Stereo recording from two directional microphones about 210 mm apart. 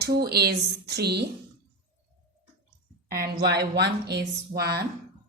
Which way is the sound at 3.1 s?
45° right (ahead or behind).